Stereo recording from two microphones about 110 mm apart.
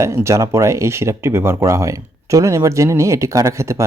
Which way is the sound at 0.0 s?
25° right (ahead or behind).